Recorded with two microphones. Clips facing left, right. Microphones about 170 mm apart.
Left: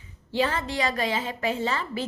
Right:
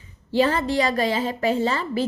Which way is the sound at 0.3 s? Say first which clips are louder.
Right 6 dB; 35° right (ahead or behind).